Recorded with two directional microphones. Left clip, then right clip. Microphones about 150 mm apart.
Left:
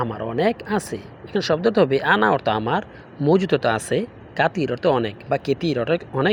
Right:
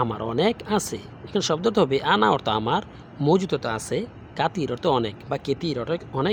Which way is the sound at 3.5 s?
15° left (ahead or behind).